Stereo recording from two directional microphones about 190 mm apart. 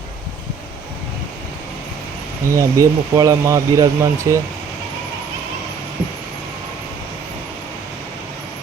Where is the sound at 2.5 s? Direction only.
15° right (ahead or behind).